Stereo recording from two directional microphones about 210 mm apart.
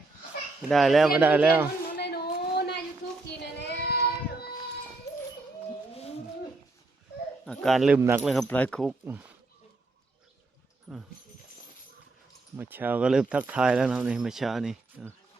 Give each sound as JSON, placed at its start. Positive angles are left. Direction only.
{"t": 0.7, "sound": "speech", "side_deg": 0}
{"t": 2.0, "sound": "a sound", "side_deg": 50}
{"t": 3.6, "sound": "child singing", "side_deg": 50}
{"t": 7.4, "sound": "speech", "side_deg": 5}
{"t": 8.3, "sound": "speech", "side_deg": 5}
{"t": 10.9, "sound": "speech", "side_deg": 0}
{"t": 12.5, "sound": "speech", "side_deg": -10}